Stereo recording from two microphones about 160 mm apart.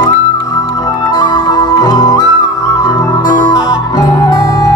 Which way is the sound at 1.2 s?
25° left (ahead or behind).